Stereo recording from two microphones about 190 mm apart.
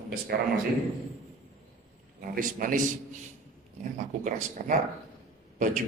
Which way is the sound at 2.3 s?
45° right (ahead or behind).